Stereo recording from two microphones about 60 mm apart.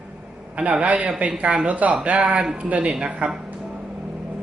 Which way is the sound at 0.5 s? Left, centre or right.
Right.